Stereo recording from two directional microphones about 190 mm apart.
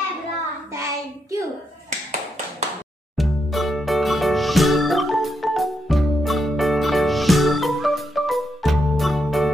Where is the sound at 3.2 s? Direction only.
Centre (ahead or behind).